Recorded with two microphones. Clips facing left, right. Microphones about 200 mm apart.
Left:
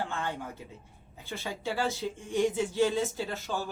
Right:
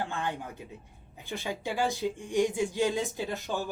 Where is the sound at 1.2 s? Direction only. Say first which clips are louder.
Right 1 dB; 15° right (ahead or behind).